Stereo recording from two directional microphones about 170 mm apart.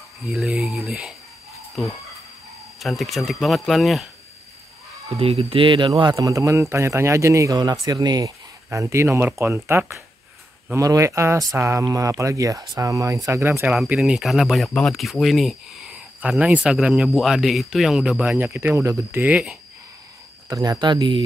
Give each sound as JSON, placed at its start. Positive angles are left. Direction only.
{"t": 0.3, "sound": "speech", "side_deg": 0}
{"t": 2.8, "sound": "speech", "side_deg": 0}
{"t": 5.1, "sound": "speech", "side_deg": -35}
{"t": 20.4, "sound": "speech", "side_deg": -20}